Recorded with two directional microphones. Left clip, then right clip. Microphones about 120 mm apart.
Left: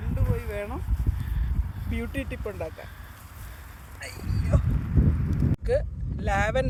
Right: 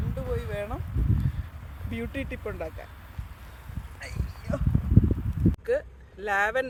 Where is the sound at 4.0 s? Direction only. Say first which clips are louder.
Left 4 dB; 30° left (ahead or behind).